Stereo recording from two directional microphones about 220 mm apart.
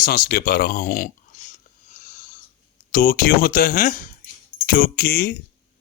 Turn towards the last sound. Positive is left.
turn(degrees=40)  # may be behind; listen again after turning